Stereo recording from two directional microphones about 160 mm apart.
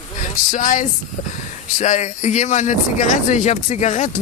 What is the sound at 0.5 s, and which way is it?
Speech, 50° left (ahead or behind).